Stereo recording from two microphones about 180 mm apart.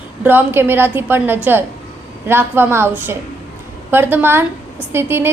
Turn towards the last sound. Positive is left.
turn(degrees=-15)  # may be behind; listen again after turning